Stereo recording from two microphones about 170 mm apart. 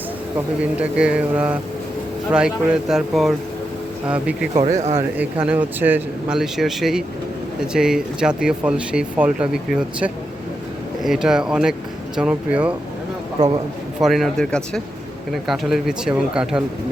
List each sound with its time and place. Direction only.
0.3 s speech: 10° right (ahead or behind)
4.6 s speech: 40° right (ahead or behind)
4.9 s speech: 10° right (ahead or behind)
14.0 s speech: centre (ahead or behind)